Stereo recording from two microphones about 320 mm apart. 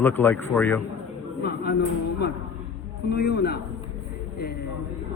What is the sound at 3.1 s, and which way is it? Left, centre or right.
Speech, left.